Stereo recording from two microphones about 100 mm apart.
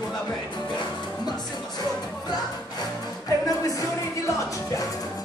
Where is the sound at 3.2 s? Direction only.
35° left (ahead or behind).